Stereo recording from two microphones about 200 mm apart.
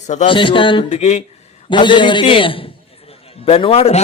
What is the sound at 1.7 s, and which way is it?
A man's voice, 25° left (ahead or behind).